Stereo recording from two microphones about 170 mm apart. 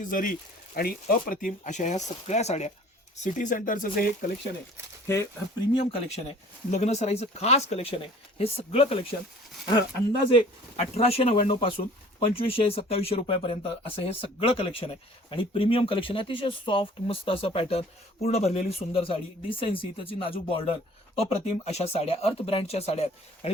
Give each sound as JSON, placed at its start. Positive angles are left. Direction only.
{"t": 0.0, "sound": "speech", "side_deg": 55}
{"t": 5.0, "sound": "speech", "side_deg": 15}
{"t": 5.7, "sound": "speech", "side_deg": 35}
{"t": 10.3, "sound": "speech", "side_deg": 35}